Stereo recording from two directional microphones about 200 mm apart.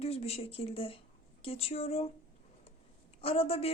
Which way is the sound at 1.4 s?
30° left (ahead or behind).